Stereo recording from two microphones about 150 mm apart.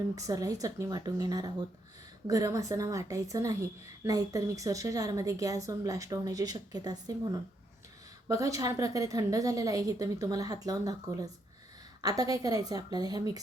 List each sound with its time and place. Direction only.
0.2 s a woman's voice: 25° right (ahead or behind)
12.0 s a woman's voice: 25° right (ahead or behind)